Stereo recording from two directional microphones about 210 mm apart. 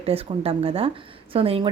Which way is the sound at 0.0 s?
30° right (ahead or behind).